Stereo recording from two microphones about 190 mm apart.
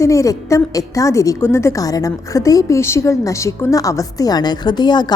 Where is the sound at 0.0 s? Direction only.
15° left (ahead or behind).